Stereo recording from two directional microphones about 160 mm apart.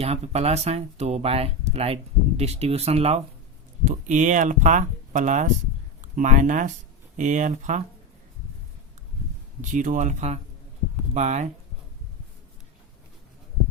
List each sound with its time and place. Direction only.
0.0 s speech: 40° right (ahead or behind)
3.8 s speech: 50° right (ahead or behind)
9.6 s speech: 50° right (ahead or behind)